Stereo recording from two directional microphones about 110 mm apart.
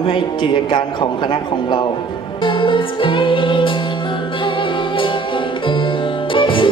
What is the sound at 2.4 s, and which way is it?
Music, 45° left (ahead or behind).